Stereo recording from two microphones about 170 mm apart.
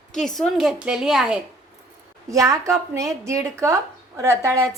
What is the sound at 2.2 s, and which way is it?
A woman's voice, 20° right (ahead or behind).